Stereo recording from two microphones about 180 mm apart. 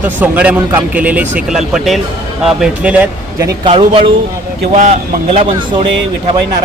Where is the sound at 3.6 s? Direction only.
30° right (ahead or behind).